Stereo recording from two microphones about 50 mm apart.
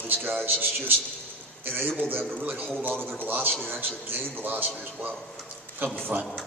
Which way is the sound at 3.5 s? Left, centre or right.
Centre.